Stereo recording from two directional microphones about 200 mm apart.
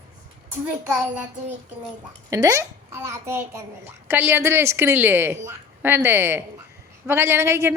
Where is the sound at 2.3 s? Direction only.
15° right (ahead or behind).